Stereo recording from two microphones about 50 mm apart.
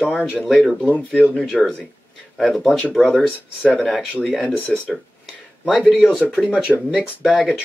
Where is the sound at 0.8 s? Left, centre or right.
Right.